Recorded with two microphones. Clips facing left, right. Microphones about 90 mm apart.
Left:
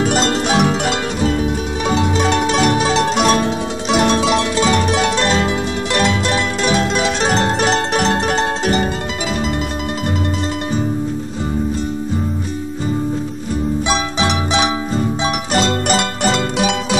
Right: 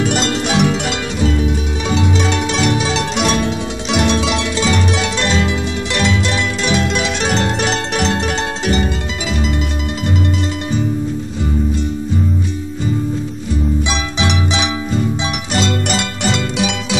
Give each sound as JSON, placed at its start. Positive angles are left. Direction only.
{"t": 0.0, "sound": "music", "side_deg": 40}
{"t": 13.8, "sound": "music", "side_deg": 40}